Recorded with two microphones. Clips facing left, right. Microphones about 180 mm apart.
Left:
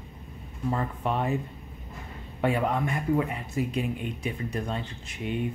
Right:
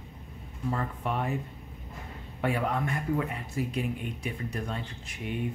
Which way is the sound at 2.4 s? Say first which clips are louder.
Left 3 dB; 20° left (ahead or behind).